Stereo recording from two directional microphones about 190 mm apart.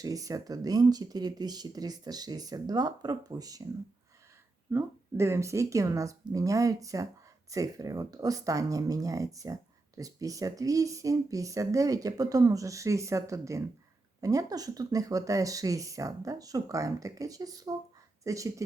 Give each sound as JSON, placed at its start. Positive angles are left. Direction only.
{"t": 0.0, "sound": "speech", "side_deg": -20}
{"t": 4.7, "sound": "speech", "side_deg": -15}